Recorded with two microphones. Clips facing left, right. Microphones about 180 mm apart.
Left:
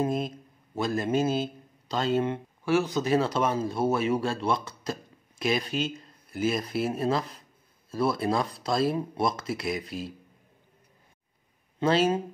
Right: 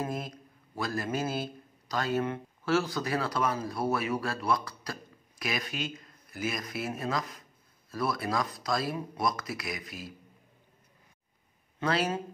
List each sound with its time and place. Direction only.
0.0 s a man's voice: 25° left (ahead or behind)
11.8 s a man's voice: 25° left (ahead or behind)